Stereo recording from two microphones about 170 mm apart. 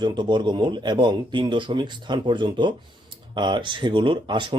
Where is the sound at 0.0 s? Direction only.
25° right (ahead or behind).